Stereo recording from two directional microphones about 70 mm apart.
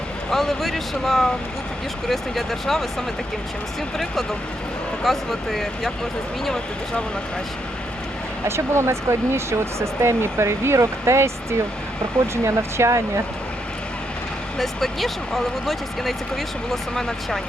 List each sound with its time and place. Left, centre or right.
0.3 s speech: centre
3.9 s speech: centre
8.4 s speech: right
14.6 s speech: centre